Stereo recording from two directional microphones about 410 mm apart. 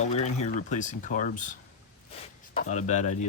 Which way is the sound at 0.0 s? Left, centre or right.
Centre.